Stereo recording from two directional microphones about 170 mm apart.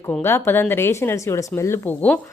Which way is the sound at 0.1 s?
15° left (ahead or behind).